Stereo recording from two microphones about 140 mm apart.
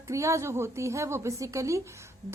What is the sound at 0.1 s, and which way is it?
Speech, 20° right (ahead or behind).